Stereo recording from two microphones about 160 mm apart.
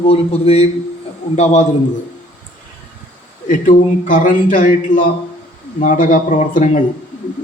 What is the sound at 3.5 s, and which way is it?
A man's voice, 55° left (ahead or behind).